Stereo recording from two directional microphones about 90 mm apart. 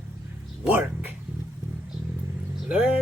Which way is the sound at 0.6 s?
20° right (ahead or behind).